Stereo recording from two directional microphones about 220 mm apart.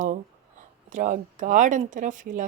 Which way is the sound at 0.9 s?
35° right (ahead or behind).